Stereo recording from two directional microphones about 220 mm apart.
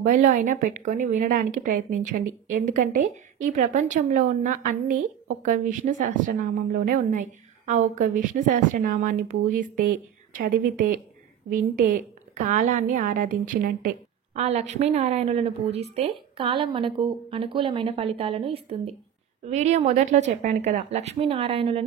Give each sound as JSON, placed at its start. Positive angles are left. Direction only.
{"t": 0.0, "sound": "speech", "side_deg": -35}
{"t": 10.3, "sound": "a woman's voice", "side_deg": -40}